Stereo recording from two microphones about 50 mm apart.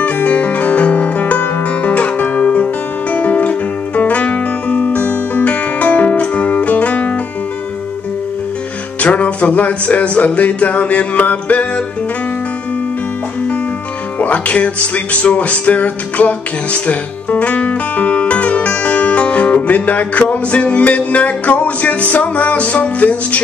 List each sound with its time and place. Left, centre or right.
0.0 s music: left
9.0 s music: left
14.1 s music: left